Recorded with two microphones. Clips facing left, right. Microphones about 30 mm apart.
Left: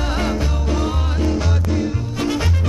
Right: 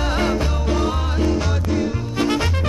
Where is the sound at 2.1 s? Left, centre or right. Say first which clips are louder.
Right 3 dB; right.